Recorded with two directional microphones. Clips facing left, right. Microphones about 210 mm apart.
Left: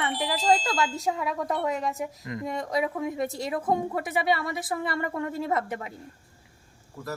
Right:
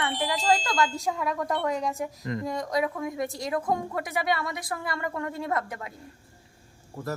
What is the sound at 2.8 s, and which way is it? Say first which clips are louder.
Speech: left 1 dB; 25° left (ahead or behind).